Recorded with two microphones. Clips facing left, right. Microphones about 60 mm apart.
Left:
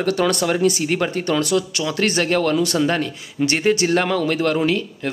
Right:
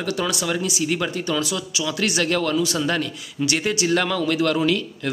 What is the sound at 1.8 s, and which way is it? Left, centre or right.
Speech, left.